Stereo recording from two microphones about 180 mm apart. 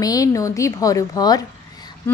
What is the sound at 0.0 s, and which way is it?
Speech, 20° left (ahead or behind).